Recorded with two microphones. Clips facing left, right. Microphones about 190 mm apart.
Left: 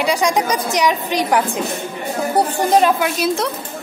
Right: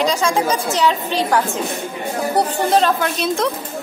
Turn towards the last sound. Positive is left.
turn(degrees=10)  # may be behind; listen again after turning